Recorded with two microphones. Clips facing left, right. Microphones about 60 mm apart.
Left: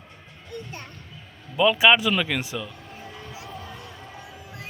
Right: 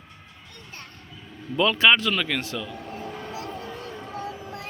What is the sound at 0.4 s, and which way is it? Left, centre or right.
A child's voice, centre.